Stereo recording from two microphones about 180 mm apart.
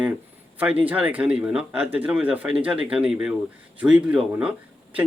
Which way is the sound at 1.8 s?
30° right (ahead or behind).